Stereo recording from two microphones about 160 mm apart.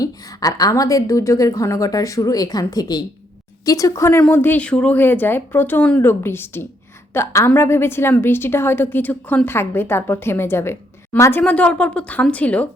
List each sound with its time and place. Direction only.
0.0 s a woman's voice: 25° left (ahead or behind)